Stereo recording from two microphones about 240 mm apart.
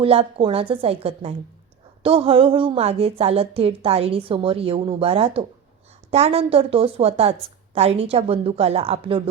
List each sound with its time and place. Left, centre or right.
0.0 s a woman's voice: right